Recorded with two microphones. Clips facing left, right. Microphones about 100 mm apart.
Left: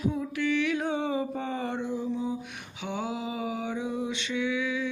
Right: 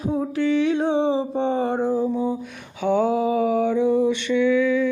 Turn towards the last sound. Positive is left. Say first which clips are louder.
# right 11 dB
turn(degrees=-50)  # may be behind; listen again after turning